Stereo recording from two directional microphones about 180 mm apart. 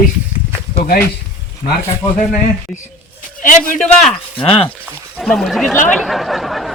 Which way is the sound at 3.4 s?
45° left (ahead or behind).